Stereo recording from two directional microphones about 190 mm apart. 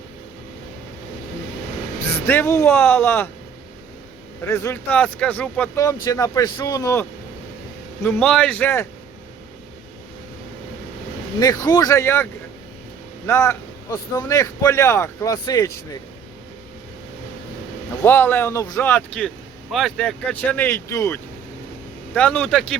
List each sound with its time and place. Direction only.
2.2 s speech: 10° left (ahead or behind)
4.4 s speech: 15° left (ahead or behind)
11.3 s speech: 20° left (ahead or behind)
18.0 s speech: 10° left (ahead or behind)